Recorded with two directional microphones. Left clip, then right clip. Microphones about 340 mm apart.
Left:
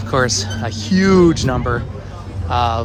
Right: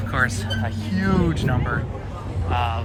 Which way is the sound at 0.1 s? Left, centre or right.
Centre.